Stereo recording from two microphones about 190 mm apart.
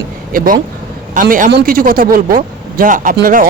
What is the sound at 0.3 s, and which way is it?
Speech, 50° right (ahead or behind).